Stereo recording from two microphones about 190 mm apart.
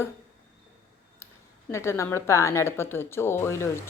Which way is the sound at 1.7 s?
15° left (ahead or behind).